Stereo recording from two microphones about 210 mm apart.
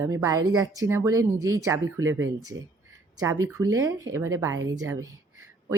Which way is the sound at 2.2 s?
15° right (ahead or behind).